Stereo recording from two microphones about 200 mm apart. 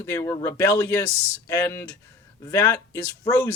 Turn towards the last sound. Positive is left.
turn(degrees=15)  # may be behind; listen again after turning